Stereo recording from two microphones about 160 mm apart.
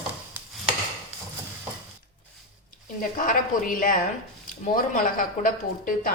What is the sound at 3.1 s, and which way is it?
Speech, 60° left (ahead or behind).